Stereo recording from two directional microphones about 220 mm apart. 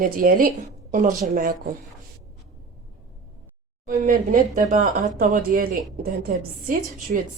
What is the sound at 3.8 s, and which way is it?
Speech, 40° right (ahead or behind).